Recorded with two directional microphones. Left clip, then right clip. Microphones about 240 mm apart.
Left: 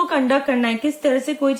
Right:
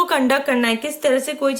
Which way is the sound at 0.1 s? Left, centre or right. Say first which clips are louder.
Right 1 dB; right.